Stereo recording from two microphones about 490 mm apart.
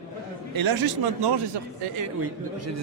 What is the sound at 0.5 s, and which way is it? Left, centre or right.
Speech, right.